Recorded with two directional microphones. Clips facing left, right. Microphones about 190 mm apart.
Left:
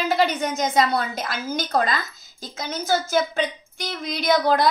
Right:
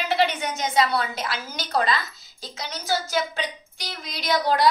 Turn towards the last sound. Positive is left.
turn(degrees=50)  # may be behind; listen again after turning